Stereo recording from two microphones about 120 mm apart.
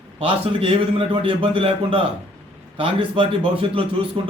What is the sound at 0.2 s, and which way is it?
A man's voice, 50° right (ahead or behind).